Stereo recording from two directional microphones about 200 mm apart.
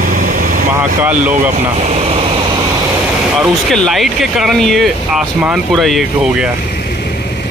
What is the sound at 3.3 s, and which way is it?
Speech, centre (ahead or behind).